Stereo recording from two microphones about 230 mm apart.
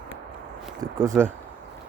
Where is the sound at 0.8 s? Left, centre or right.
Centre.